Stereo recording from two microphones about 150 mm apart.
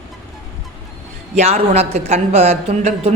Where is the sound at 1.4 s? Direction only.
45° right (ahead or behind).